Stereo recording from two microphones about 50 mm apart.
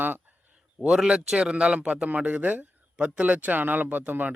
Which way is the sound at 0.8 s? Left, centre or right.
Centre.